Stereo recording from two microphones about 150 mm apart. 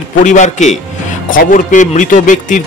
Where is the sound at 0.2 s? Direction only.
55° left (ahead or behind).